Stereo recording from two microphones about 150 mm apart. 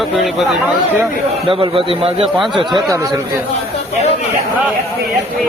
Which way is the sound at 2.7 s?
Centre (ahead or behind).